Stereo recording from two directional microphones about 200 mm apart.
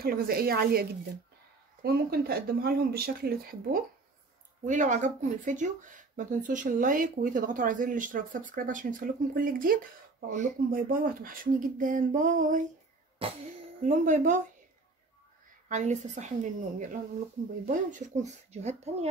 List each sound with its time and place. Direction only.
0.0 s speech: 50° right (ahead or behind)
13.2 s a sound: 25° right (ahead or behind)
13.7 s speech: 40° right (ahead or behind)
15.7 s speech: 35° right (ahead or behind)